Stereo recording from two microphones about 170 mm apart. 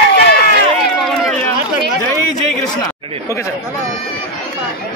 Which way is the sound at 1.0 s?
Centre (ahead or behind).